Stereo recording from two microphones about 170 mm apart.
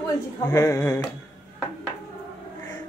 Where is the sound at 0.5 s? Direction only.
15° left (ahead or behind).